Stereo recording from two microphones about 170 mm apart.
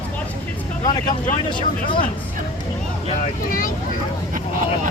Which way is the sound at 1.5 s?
30° left (ahead or behind).